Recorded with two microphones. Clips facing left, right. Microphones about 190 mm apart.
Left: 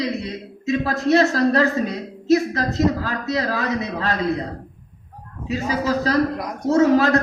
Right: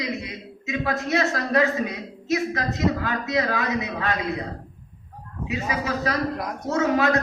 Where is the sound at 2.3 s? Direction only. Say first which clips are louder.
Left 7 dB; 35° left (ahead or behind).